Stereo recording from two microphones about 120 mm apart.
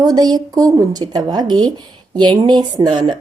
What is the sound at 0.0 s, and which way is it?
A woman's voice, 35° right (ahead or behind).